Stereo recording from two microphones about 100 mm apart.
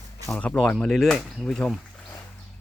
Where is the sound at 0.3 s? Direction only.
10° left (ahead or behind).